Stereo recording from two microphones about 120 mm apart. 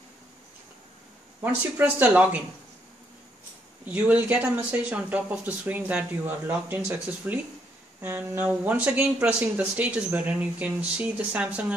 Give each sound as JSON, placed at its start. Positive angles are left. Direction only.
{"t": 1.4, "sound": "speech", "side_deg": -15}
{"t": 3.8, "sound": "speech", "side_deg": -15}